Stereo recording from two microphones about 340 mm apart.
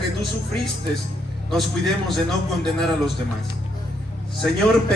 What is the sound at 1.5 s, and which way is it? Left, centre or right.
A man's voice, centre.